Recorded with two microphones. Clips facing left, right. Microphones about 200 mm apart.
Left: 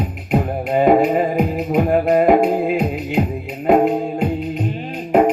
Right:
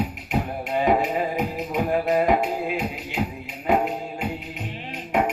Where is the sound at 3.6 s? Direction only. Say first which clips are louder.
Left 8 dB; 35° left (ahead or behind).